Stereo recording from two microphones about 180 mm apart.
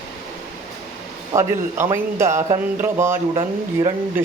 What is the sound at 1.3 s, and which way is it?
A man's voice, 15° right (ahead or behind).